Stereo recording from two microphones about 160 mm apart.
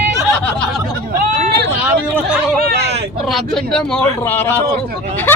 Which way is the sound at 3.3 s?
5° left (ahead or behind).